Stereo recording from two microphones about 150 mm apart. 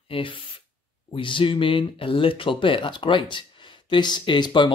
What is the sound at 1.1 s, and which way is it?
Speech, 35° left (ahead or behind).